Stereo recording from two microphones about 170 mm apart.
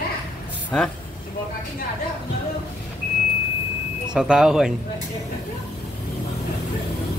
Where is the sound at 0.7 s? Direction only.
5° left (ahead or behind).